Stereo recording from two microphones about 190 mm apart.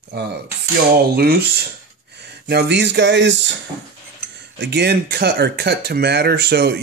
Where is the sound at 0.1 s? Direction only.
60° right (ahead or behind).